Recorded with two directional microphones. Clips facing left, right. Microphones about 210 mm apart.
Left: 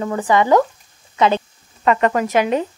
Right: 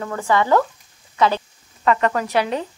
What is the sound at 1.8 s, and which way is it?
Speech, 20° left (ahead or behind).